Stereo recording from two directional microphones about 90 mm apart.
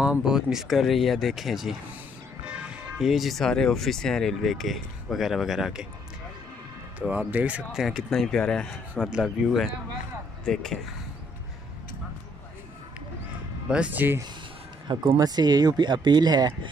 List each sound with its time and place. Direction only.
0.0 s speech: 10° right (ahead or behind)
7.0 s speech: 15° right (ahead or behind)
7.8 s speech: centre (ahead or behind)
9.0 s speech: 10° right (ahead or behind)
13.7 s speech: 10° right (ahead or behind)
15.1 s speech: 50° right (ahead or behind)